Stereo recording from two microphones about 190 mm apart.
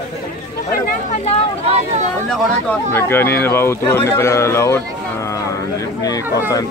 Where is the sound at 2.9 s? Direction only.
10° left (ahead or behind).